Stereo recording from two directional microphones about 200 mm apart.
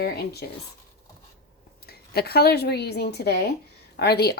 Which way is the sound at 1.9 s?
50° left (ahead or behind).